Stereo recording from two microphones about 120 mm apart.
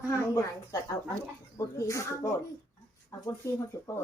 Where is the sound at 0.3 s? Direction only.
25° left (ahead or behind).